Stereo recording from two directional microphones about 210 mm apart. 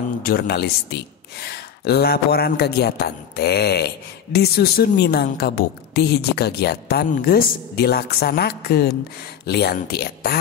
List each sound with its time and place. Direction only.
0.2 s speech: 45° left (ahead or behind)